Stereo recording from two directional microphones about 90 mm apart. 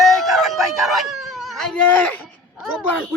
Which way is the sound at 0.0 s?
Centre (ahead or behind).